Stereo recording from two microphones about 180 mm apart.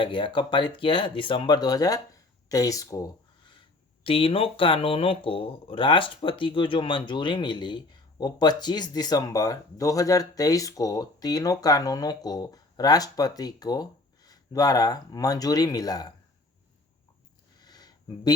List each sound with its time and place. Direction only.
0.0 s speech: 25° left (ahead or behind)
4.0 s speech: 30° left (ahead or behind)
17.6 s a sound: 20° left (ahead or behind)